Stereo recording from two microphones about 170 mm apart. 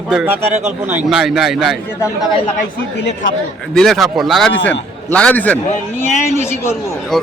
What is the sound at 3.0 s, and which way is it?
Speech, 90° left.